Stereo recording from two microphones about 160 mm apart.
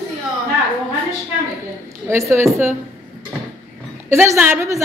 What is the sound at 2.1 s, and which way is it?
Speech, 15° right (ahead or behind).